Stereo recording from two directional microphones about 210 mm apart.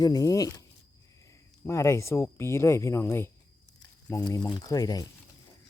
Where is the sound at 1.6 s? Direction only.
15° left (ahead or behind).